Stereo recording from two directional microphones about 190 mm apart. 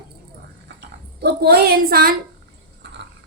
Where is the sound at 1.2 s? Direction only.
60° right (ahead or behind).